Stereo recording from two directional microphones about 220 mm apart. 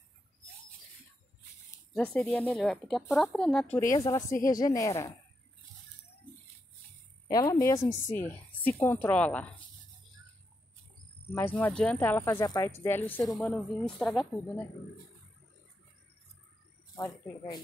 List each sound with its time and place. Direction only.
2.1 s speech: 5° left (ahead or behind)
3.9 s speech: 15° left (ahead or behind)
4.3 s speech: 40° left (ahead or behind)
4.6 s speech: 15° left (ahead or behind)
7.2 s speech: 15° left (ahead or behind)
11.3 s speech: 10° left (ahead or behind)
16.9 s speech: 15° left (ahead or behind)